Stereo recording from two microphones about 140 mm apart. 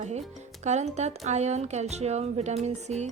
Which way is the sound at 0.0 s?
55° right (ahead or behind).